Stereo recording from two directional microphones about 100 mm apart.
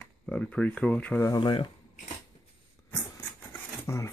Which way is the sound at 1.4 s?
60° left (ahead or behind).